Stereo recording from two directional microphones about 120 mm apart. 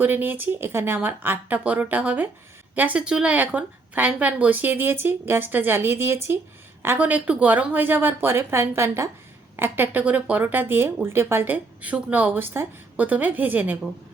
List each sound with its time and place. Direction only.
0.0 s speech: 15° right (ahead or behind)